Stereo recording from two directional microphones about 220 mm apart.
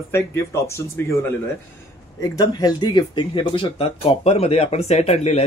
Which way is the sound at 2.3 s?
15° left (ahead or behind).